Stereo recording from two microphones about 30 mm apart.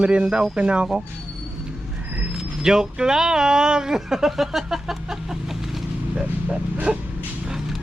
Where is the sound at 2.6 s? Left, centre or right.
Right.